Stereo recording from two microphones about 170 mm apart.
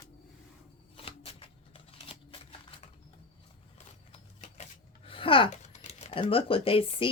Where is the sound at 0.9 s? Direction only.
35° left (ahead or behind).